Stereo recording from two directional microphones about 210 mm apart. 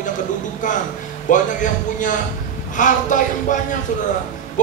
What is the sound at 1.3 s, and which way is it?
Speech, 35° left (ahead or behind).